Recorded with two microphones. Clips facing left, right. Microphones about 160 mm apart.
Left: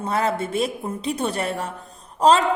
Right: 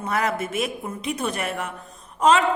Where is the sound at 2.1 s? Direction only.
35° left (ahead or behind).